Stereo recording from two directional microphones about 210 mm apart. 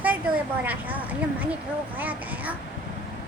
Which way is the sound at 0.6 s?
10° right (ahead or behind).